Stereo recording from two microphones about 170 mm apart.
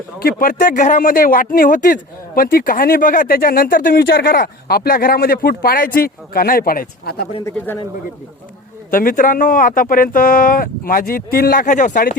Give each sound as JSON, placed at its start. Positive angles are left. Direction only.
{"t": 0.2, "sound": "speech", "side_deg": 60}
{"t": 7.4, "sound": "speech", "side_deg": 10}
{"t": 8.9, "sound": "speech", "side_deg": 55}